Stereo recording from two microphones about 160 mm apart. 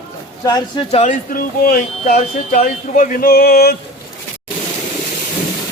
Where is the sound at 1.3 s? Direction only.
60° left (ahead or behind).